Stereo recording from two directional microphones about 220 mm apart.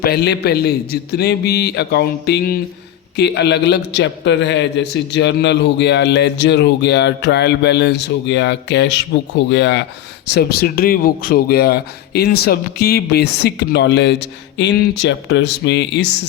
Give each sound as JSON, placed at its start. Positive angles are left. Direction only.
{"t": 0.0, "sound": "a man's voice", "side_deg": 45}